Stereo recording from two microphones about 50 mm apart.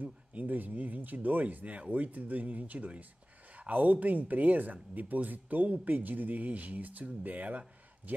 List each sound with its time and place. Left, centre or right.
0.0 s speech: right